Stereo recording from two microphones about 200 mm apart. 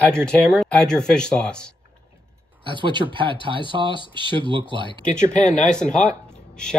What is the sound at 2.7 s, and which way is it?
Speech, 25° right (ahead or behind).